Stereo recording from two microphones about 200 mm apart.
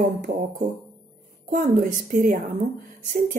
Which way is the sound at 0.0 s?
40° right (ahead or behind).